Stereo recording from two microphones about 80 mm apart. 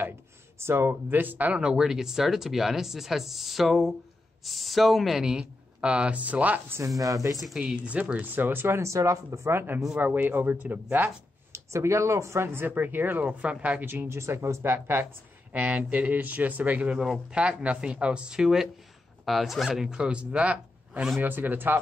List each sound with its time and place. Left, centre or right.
0.6 s speech: right
1.7 s speech: centre
5.2 s speech: centre
7.0 s speech: right
7.3 s speech: centre
7.6 s speech: centre
11.5 s speech: right; by 21.2 s centre
21.2 s speech: right